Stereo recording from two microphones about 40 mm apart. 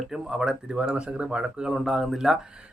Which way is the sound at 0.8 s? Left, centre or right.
Right.